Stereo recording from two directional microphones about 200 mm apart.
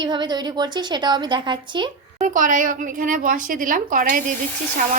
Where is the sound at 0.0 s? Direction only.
20° right (ahead or behind).